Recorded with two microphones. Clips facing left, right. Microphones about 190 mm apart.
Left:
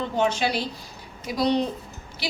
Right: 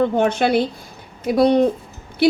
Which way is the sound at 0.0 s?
55° right (ahead or behind).